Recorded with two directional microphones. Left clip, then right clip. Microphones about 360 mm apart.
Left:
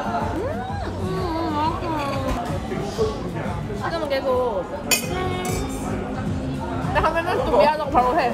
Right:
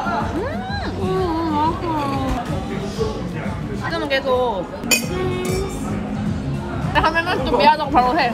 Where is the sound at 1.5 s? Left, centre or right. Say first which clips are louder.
Right 3 dB; centre.